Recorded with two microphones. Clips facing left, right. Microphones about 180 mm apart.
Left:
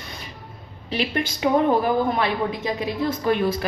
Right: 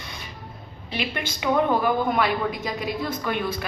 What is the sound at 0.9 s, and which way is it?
A woman's voice, 40° left (ahead or behind).